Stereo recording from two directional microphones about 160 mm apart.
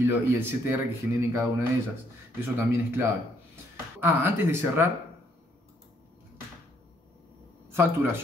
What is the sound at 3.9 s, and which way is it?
Speech, 10° right (ahead or behind).